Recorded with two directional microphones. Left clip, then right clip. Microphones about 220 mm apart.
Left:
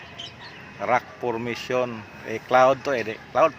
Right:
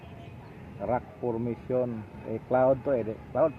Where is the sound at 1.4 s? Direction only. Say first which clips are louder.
Left 4 dB; 20° left (ahead or behind).